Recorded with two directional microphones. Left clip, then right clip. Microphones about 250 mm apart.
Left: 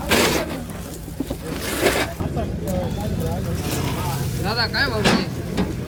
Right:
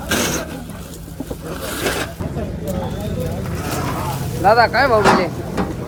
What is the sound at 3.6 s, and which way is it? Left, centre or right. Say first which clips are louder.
Vehicle: right 5 dB; left.